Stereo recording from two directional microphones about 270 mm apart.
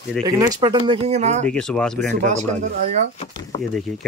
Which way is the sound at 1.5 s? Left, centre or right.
Centre.